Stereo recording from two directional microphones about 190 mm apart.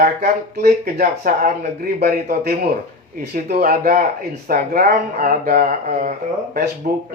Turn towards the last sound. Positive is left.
turn(degrees=-50)  # may be behind; listen again after turning